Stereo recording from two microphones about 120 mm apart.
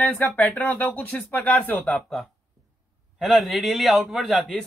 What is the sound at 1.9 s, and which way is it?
A man's voice, centre (ahead or behind).